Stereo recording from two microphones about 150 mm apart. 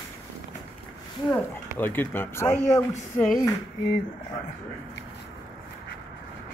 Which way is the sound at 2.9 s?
70° left (ahead or behind).